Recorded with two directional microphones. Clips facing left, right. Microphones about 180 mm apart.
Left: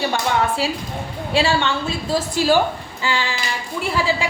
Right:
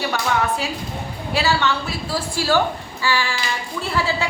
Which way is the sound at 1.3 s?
25° left (ahead or behind).